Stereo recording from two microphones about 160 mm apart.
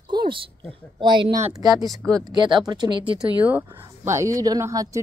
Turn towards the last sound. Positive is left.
turn(degrees=-20)  # may be behind; listen again after turning